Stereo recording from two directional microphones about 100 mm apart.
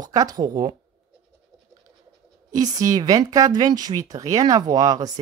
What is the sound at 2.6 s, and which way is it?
Speech, 35° right (ahead or behind).